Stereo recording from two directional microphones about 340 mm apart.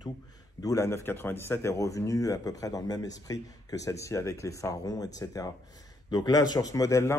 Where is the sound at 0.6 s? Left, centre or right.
Centre.